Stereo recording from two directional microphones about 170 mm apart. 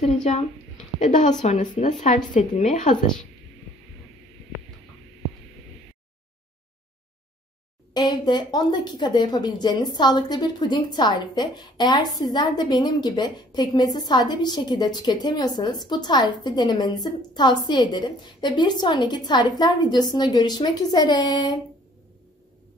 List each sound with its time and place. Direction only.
0.0 s a woman's voice: 40° left (ahead or behind)
7.9 s a woman's voice: 25° left (ahead or behind)